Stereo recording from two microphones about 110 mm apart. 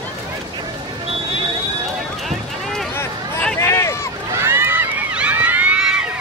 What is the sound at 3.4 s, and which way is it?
Run, 15° left (ahead or behind).